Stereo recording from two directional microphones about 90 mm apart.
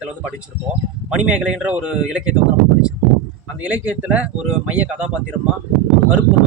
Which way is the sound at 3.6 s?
15° right (ahead or behind).